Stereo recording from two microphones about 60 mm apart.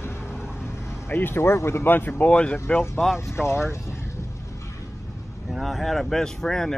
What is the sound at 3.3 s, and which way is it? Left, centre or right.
Speech, left.